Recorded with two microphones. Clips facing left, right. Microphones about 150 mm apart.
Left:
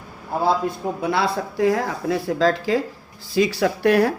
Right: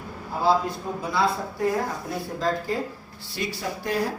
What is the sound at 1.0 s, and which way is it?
Speech, 70° left (ahead or behind).